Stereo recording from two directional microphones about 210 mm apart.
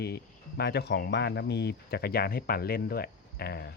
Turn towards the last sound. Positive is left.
turn(degrees=50)  # may be behind; listen again after turning